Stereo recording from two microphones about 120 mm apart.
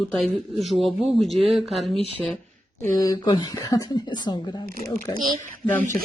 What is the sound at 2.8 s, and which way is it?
A woman's voice, 25° left (ahead or behind).